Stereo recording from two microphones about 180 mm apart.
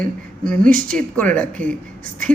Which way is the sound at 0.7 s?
50° right (ahead or behind).